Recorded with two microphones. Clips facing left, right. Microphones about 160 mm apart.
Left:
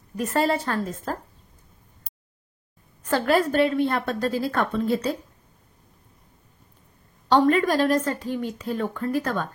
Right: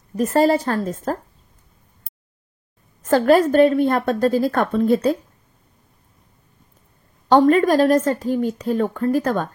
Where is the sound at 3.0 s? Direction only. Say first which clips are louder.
Right 7 dB; 45° right (ahead or behind).